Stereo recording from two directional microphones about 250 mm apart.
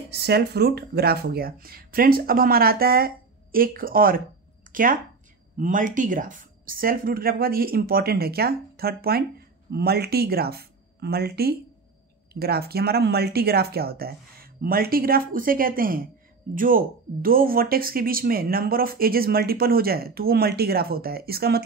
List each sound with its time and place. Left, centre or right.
0.1 s speech: right
5.6 s speech: right